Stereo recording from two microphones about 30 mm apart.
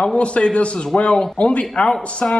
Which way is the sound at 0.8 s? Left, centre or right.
Left.